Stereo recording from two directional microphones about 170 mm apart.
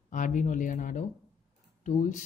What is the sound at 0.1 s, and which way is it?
Speech, 50° left (ahead or behind).